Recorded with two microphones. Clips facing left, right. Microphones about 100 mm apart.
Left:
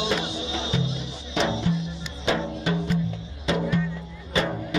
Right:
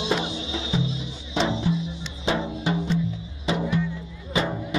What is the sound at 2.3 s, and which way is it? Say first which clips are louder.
Music: even; 10° right (ahead or behind).